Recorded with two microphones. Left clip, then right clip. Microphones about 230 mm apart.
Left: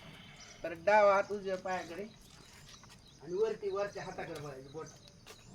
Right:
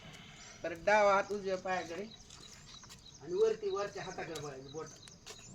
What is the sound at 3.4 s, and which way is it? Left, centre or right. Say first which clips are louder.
Speech: right 2 dB; right.